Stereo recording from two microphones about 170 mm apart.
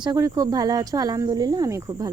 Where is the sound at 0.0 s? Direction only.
25° right (ahead or behind).